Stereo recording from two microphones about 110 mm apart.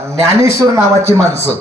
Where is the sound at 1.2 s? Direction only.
70° left (ahead or behind).